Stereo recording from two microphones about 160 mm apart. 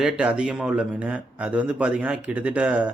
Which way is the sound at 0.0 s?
5° right (ahead or behind).